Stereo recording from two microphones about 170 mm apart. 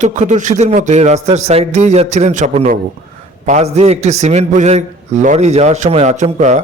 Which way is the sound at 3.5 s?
40° right (ahead or behind).